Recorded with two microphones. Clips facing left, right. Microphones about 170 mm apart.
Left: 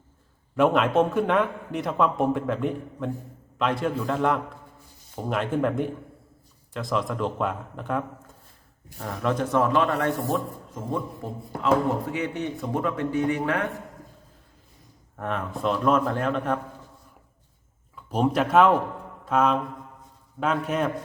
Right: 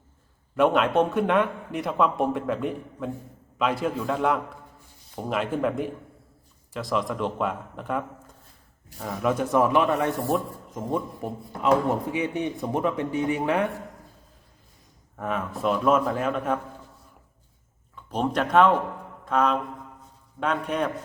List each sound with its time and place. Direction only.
0.5 s a man's voice: centre (ahead or behind); by 13.7 s 20° right (ahead or behind)
15.1 s a man's voice: centre (ahead or behind)
17.9 s a man's voice: 10° left (ahead or behind)